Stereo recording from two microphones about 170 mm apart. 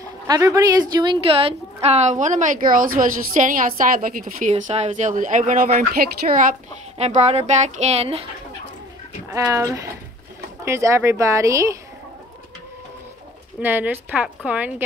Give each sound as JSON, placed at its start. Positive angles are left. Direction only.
{"t": 0.3, "sound": "a woman's voice", "side_deg": -20}
{"t": 4.7, "sound": "a woman's voice", "side_deg": -45}
{"t": 7.0, "sound": "speech", "side_deg": -40}
{"t": 9.3, "sound": "speech", "side_deg": -15}
{"t": 13.6, "sound": "speech", "side_deg": -10}